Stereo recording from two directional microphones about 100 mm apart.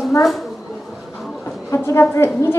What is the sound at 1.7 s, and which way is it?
Speech, 30° left (ahead or behind).